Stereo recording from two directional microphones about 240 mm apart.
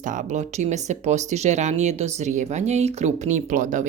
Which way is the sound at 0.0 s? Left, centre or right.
Right.